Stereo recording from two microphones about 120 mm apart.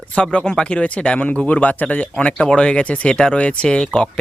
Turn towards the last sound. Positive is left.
turn(degrees=10)  # may be behind; listen again after turning